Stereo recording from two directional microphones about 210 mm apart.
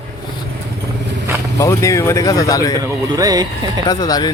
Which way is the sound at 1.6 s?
15° left (ahead or behind).